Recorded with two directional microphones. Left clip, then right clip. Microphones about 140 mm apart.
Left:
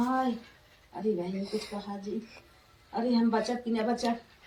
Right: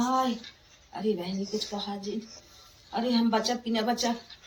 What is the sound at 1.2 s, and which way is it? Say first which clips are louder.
Speech: right 2 dB; 5° right (ahead or behind).